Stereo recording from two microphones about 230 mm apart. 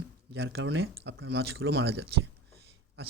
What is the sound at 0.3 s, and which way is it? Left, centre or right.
A man's voice, right.